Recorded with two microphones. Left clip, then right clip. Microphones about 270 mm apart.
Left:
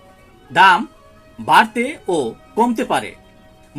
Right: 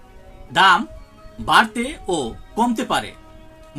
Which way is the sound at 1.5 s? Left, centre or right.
Centre.